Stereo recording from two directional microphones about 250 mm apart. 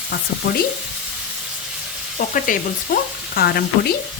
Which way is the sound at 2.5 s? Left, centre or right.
Left.